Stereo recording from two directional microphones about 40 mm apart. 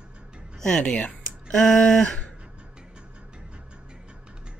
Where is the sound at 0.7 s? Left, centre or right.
Centre.